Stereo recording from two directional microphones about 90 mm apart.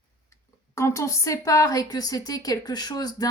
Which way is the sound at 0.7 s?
35° left (ahead or behind).